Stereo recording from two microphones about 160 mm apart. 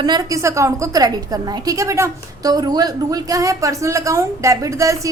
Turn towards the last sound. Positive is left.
turn(degrees=-20)  # may be behind; listen again after turning